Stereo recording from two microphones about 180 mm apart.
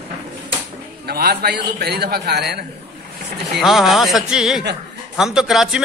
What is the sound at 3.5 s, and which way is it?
A man's voice, centre (ahead or behind).